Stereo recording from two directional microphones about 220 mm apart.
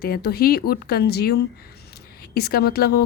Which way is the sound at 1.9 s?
45° left (ahead or behind).